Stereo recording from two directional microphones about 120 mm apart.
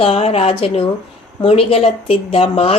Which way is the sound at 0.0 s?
55° left (ahead or behind).